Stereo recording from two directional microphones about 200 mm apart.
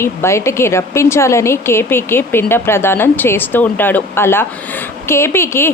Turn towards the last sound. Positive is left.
turn(degrees=10)  # may be behind; listen again after turning